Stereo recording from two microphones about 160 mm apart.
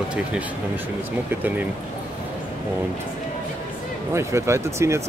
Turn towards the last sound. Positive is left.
turn(degrees=-15)  # may be behind; listen again after turning